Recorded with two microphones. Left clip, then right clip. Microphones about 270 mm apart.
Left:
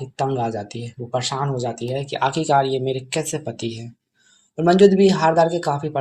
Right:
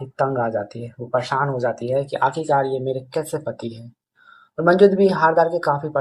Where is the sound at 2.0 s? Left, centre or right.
Left.